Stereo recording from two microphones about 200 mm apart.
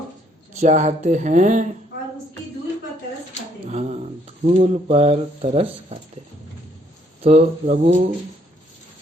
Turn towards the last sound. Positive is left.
turn(degrees=-40)  # may be behind; listen again after turning